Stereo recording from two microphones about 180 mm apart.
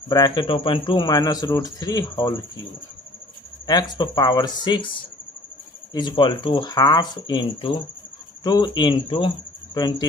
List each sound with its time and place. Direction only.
0.1 s speech: 20° left (ahead or behind)
3.7 s speech: 25° left (ahead or behind)
5.9 s speech: 25° left (ahead or behind)